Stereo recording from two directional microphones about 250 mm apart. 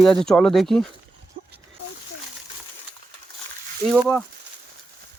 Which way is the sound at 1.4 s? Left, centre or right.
Right.